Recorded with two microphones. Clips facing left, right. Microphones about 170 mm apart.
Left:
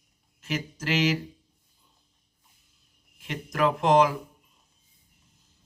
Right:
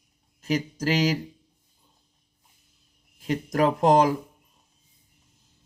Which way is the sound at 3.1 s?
35° right (ahead or behind).